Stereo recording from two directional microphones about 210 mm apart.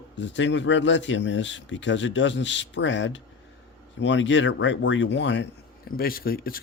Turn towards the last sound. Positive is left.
turn(degrees=45)  # may be behind; listen again after turning